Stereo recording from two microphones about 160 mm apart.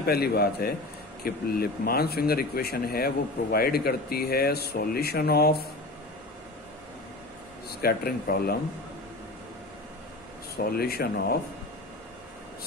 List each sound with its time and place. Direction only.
0.0 s speech: 75° left (ahead or behind)
7.8 s speech: 70° left (ahead or behind)
10.5 s speech: 75° left (ahead or behind)